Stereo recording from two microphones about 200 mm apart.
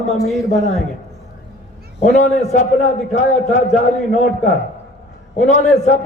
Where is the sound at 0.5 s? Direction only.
35° left (ahead or behind).